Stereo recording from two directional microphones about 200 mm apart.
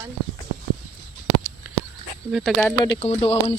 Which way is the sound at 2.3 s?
Centre (ahead or behind).